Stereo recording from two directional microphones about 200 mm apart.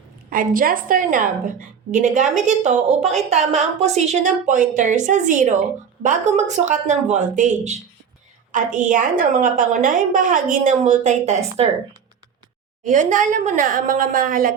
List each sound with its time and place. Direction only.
0.3 s a woman's voice: 45° right (ahead or behind)
12.8 s a woman's voice: 40° right (ahead or behind)